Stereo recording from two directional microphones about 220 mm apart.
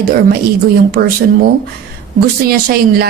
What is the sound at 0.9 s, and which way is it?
A woman's voice, 45° right (ahead or behind).